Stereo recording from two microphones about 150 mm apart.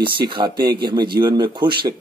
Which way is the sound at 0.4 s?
25° right (ahead or behind).